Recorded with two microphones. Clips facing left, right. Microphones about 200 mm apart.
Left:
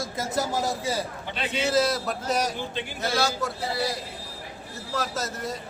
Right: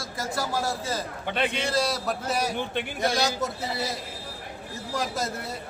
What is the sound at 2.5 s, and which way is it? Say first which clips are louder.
Speech: right 3 dB; 60° right (ahead or behind).